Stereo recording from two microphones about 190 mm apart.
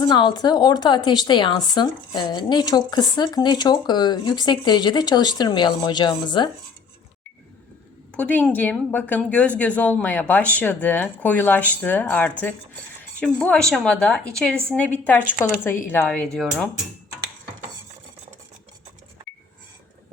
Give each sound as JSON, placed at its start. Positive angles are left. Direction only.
{"t": 0.0, "sound": "a woman's voice", "side_deg": 20}
{"t": 8.1, "sound": "a woman's voice", "side_deg": 10}